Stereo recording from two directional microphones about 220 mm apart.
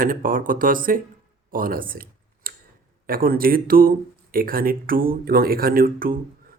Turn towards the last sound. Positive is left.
turn(degrees=-40)  # may be behind; listen again after turning